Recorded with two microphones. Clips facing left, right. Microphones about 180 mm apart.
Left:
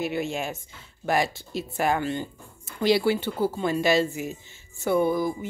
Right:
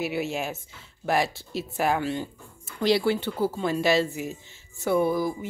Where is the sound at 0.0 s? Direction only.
5° right (ahead or behind).